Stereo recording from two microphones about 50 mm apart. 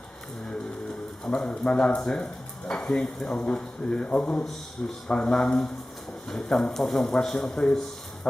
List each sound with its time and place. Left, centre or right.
1.2 s speech: left